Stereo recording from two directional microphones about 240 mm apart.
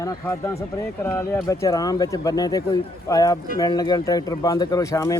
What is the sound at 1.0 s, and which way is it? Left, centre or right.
Speech, centre.